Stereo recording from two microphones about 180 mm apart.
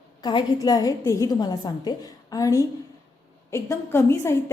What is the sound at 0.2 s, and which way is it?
A woman's voice, 20° left (ahead or behind).